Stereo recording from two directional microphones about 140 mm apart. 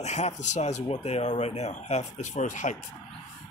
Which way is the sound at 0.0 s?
55° left (ahead or behind).